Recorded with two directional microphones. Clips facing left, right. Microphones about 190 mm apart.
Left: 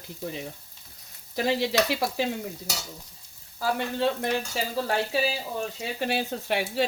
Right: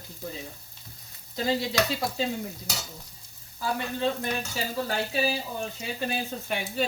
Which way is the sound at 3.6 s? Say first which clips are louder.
Left 3 dB; 80° left.